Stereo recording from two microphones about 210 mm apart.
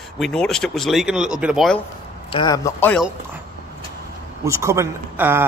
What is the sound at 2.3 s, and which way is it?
Speech, 20° left (ahead or behind).